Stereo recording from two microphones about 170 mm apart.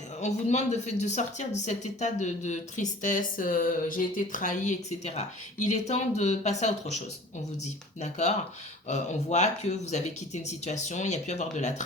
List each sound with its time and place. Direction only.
0.2 s speech: 40° left (ahead or behind)
8.0 s speech: 45° left (ahead or behind)